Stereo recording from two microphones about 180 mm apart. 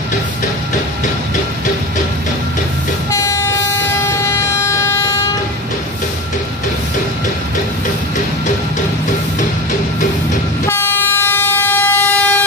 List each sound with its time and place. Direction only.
3.1 s toot: 20° left (ahead or behind)
4.1 s vehicle: 15° left (ahead or behind)
10.7 s vehicle: 15° left (ahead or behind)